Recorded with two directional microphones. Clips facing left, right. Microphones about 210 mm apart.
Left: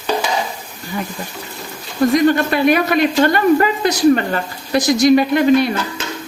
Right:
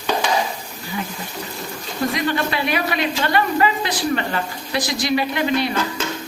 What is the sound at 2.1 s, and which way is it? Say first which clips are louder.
A man's voice: left 10 dB; 45° left (ahead or behind).